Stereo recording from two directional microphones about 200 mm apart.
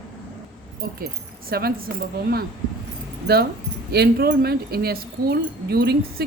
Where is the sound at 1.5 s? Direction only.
50° right (ahead or behind).